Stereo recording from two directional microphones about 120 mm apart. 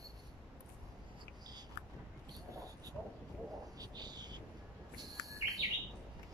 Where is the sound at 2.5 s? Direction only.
30° right (ahead or behind).